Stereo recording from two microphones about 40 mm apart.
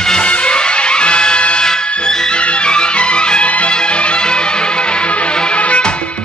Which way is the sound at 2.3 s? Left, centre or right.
Left.